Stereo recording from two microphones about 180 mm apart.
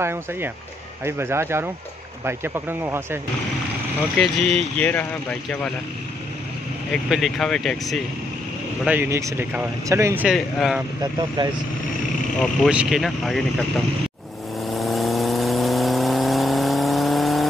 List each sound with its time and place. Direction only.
0.0 s speech: 10° right (ahead or behind)
4.2 s speech: 5° left (ahead or behind)
6.9 s speech: centre (ahead or behind)
8.8 s speech: 10° right (ahead or behind)
10.2 s speech: centre (ahead or behind)
11.0 s speech: 25° right (ahead or behind)
12.4 s speech: 5° right (ahead or behind)
14.7 s vehicle: centre (ahead or behind)